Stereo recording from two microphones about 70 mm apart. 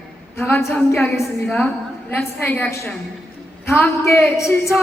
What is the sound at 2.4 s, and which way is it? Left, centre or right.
Speech, left.